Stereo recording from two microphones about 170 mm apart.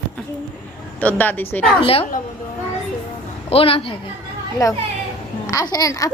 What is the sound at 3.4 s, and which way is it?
Speech, 35° left (ahead or behind).